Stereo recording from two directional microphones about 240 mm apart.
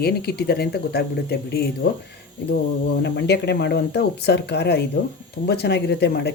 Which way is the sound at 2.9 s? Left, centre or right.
Left.